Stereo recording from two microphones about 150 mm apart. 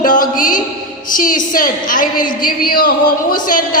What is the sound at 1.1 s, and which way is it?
A woman's voice, 65° left (ahead or behind).